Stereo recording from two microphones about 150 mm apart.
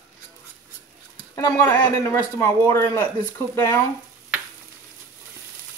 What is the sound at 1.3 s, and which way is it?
Speech, 20° left (ahead or behind).